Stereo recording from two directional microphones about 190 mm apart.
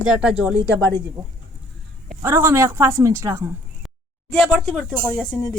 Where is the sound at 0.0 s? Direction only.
5° right (ahead or behind).